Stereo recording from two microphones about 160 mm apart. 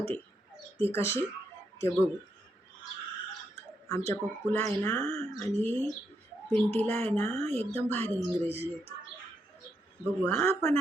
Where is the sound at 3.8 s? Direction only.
15° left (ahead or behind).